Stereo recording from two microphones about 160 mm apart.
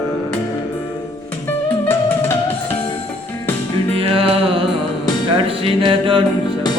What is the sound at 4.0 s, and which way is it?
Music, 35° right (ahead or behind).